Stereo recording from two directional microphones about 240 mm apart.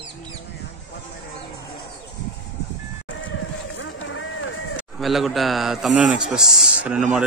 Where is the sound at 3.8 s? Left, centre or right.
Left.